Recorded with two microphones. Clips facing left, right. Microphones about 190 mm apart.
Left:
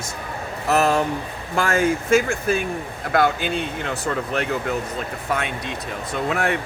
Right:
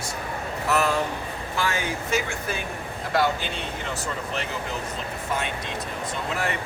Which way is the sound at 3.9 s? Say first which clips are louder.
Left 7 dB; 55° left (ahead or behind).